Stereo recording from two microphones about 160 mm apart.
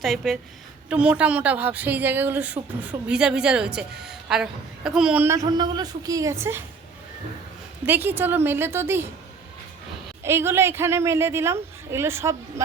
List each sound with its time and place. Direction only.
0.0 s a woman's voice: centre (ahead or behind); by 6.7 s 15° right (ahead or behind)
7.9 s a woman's voice: 15° right (ahead or behind)
10.2 s a woman's voice: 15° right (ahead or behind)